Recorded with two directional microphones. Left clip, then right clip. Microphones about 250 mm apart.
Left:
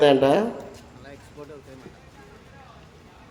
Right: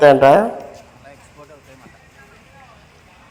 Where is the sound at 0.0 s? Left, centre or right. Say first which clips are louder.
Right 8 dB; centre.